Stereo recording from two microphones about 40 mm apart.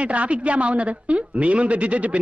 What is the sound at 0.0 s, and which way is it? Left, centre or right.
A woman's voice, right.